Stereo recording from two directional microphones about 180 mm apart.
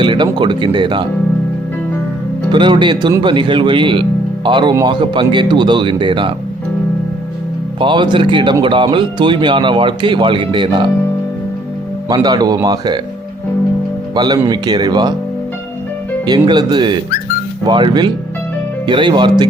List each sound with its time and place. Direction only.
0.0 s speech: 25° right (ahead or behind)
2.5 s speech: 25° right (ahead or behind)
7.8 s speech: 25° right (ahead or behind)
12.0 s speech: 25° right (ahead or behind)
14.2 s speech: 25° right (ahead or behind)
16.2 s speech: 25° right (ahead or behind)